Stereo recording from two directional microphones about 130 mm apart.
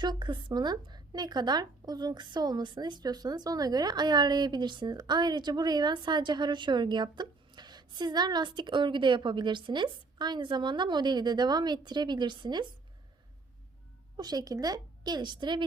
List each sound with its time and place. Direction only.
0.0 s speech: 35° right (ahead or behind)
14.2 s speech: 30° right (ahead or behind)